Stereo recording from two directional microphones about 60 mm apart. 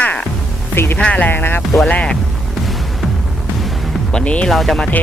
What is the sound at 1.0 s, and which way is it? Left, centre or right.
Speech, left.